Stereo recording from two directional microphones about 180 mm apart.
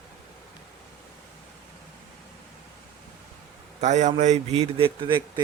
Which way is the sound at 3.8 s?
40° right (ahead or behind).